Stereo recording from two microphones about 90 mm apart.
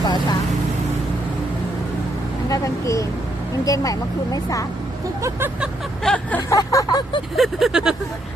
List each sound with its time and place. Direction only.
0.0 s vehicle: 55° left (ahead or behind)
2.5 s speech: 35° left (ahead or behind)
6.0 s a sound: 5° left (ahead or behind)
6.5 s speech: 40° left (ahead or behind)
7.3 s vehicle: centre (ahead or behind)